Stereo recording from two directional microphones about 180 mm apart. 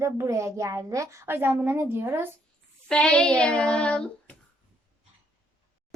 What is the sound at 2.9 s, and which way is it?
Child singing, 5° left (ahead or behind).